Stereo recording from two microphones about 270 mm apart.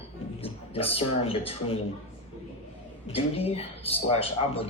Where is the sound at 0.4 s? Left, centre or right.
Left.